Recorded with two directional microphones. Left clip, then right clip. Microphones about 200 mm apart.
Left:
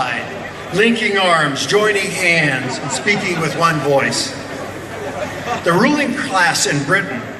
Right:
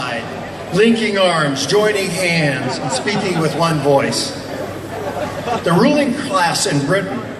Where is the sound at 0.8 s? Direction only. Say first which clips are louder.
Right 1 dB; 25° right (ahead or behind).